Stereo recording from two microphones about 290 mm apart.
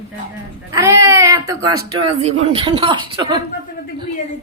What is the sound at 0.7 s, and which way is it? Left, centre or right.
Speech, centre.